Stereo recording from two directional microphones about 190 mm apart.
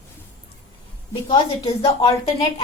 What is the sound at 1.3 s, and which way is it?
A woman's voice, 25° left (ahead or behind).